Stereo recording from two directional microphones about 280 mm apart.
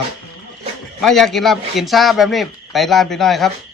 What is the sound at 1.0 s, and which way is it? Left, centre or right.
Speech, centre.